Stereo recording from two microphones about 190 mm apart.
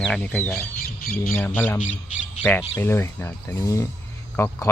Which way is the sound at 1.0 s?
50° left (ahead or behind).